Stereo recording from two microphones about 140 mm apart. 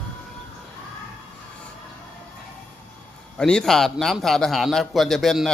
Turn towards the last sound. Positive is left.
turn(degrees=0)  # may be behind; listen again after turning